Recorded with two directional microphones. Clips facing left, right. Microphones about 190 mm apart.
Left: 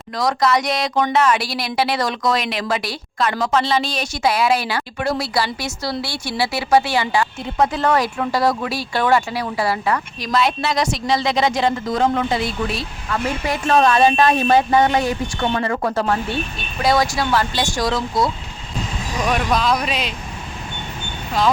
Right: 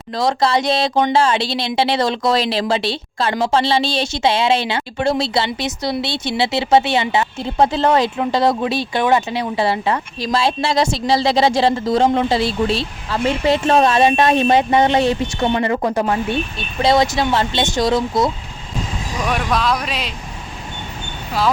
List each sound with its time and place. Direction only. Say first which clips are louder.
0.2 s speech: right 1 dB; 30° right (ahead or behind)
19.3 s speech: even; centre (ahead or behind)